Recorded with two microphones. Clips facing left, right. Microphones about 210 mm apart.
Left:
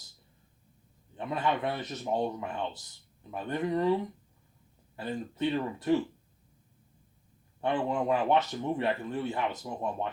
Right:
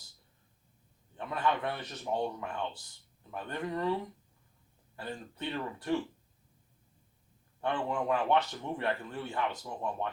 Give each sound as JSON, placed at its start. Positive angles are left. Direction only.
{"t": 1.1, "sound": "speech", "side_deg": 20}
{"t": 4.9, "sound": "speech", "side_deg": 20}
{"t": 7.9, "sound": "speech", "side_deg": 20}